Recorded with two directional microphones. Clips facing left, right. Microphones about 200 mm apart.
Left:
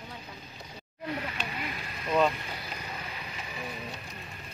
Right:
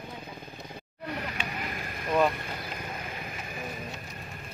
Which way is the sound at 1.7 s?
50° right (ahead or behind).